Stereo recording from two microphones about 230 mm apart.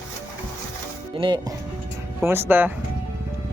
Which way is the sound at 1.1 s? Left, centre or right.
Right.